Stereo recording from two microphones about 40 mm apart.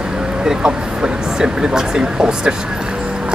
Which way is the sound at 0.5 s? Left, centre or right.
Right.